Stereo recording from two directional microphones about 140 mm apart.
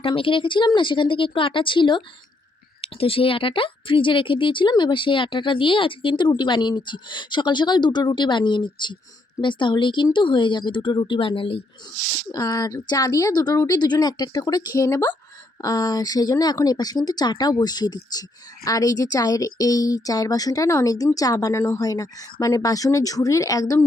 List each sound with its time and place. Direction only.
0.0 s speech: 40° left (ahead or behind)
12.3 s speech: 25° left (ahead or behind)